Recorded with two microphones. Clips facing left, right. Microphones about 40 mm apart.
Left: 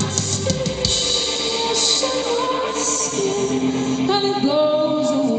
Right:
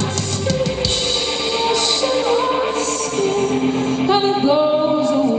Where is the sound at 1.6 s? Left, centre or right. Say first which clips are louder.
Right 4 dB; right.